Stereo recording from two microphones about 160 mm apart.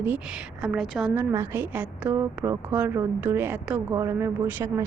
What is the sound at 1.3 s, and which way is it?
A woman's voice, 15° right (ahead or behind).